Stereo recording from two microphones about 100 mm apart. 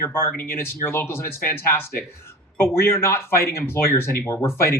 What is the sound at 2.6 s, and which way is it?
Speech, 25° left (ahead or behind).